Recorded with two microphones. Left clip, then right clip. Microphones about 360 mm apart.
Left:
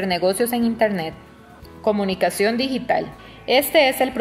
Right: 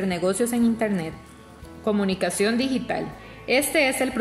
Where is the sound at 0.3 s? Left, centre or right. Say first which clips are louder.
Left 3 dB; centre.